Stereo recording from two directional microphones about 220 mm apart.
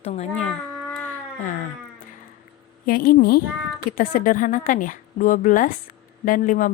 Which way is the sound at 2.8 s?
40° left (ahead or behind).